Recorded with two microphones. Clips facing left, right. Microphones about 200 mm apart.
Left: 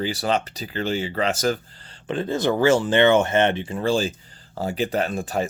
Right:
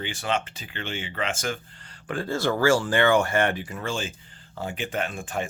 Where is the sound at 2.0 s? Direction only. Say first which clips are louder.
Left 4 dB; 20° left (ahead or behind).